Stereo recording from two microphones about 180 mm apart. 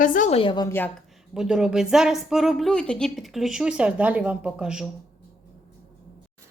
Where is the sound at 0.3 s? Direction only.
25° left (ahead or behind).